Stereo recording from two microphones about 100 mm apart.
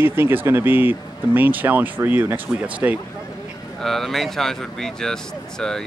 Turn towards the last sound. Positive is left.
turn(degrees=5)  # may be behind; listen again after turning